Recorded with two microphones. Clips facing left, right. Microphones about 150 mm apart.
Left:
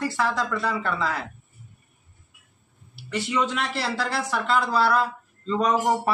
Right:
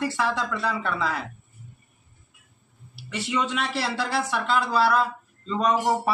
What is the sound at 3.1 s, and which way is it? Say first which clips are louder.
Speech: left 2 dB; centre (ahead or behind).